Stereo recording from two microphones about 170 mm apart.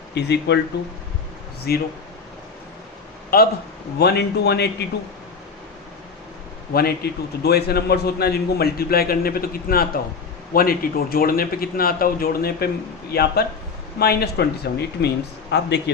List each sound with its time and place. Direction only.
0.1 s speech: 85° left
1.7 s speech: 65° left (ahead or behind)
3.2 s a man's voice: 60° left (ahead or behind)
3.9 s speech: 75° left (ahead or behind)
6.7 s a man's voice: 70° left (ahead or behind)